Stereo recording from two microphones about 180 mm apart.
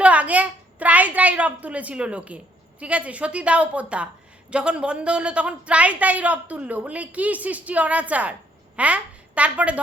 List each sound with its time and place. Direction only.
0.0 s a woman's voice: 5° right (ahead or behind)